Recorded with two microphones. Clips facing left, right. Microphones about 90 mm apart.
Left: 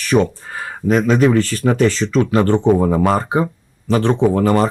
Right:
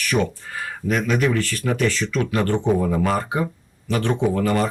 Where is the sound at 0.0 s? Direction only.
35° left (ahead or behind).